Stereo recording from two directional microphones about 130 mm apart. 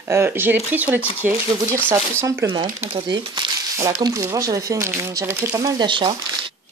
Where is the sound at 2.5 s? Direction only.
40° right (ahead or behind).